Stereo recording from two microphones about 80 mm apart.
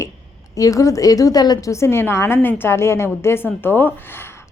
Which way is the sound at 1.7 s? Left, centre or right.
Left.